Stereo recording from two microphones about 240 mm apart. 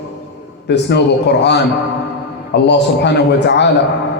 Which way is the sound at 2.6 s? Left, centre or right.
Left.